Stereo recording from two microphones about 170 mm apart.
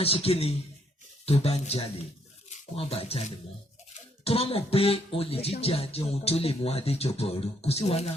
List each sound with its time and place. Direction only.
0.0 s speech: 35° left (ahead or behind)